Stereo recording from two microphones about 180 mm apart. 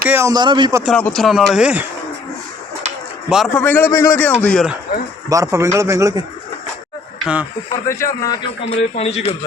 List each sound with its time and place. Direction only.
0.0 s a man's voice: 10° right (ahead or behind)
0.9 s speech: 5° left (ahead or behind)
3.2 s speech: centre (ahead or behind)
3.6 s a man's voice: 10° left (ahead or behind)
5.3 s a man's voice: 15° right (ahead or behind)
7.9 s a man's voice: 15° left (ahead or behind)
8.7 s speech: 35° left (ahead or behind)